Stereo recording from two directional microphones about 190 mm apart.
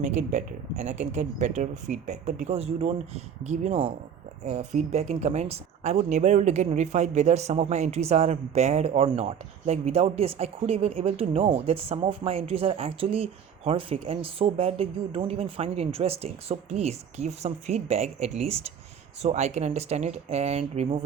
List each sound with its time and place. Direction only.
0.0 s speech: 40° right (ahead or behind)